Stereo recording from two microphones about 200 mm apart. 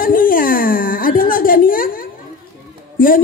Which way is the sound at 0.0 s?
45° left (ahead or behind).